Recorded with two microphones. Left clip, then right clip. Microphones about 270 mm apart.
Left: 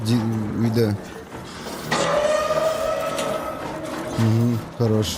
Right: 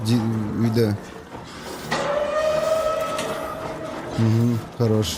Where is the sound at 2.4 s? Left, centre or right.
Centre.